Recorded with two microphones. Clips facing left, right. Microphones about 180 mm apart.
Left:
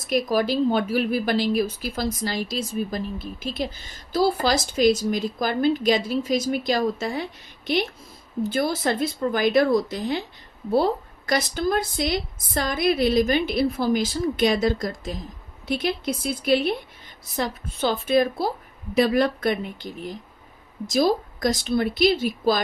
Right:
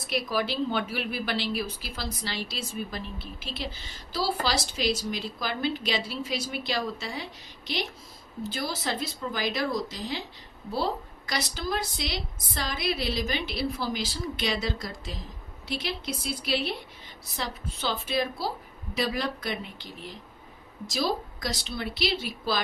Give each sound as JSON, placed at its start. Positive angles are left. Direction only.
{"t": 0.1, "sound": "a woman's voice", "side_deg": 45}